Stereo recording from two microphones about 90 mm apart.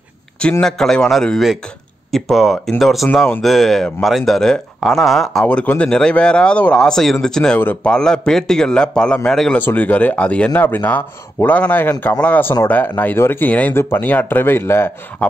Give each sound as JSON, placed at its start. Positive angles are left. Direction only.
{"t": 0.4, "sound": "speech", "side_deg": 10}
{"t": 5.4, "sound": "speech", "side_deg": 15}
{"t": 9.6, "sound": "speech", "side_deg": 20}